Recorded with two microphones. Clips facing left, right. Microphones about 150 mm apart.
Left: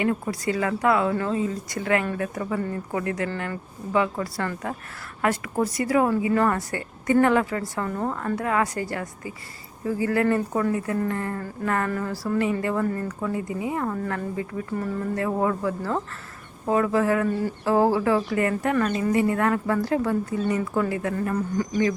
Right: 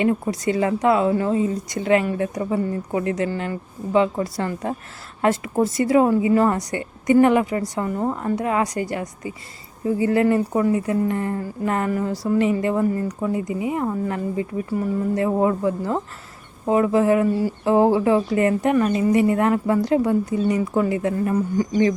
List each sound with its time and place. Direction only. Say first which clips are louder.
0.0 s speech: right 4 dB; 20° right (ahead or behind)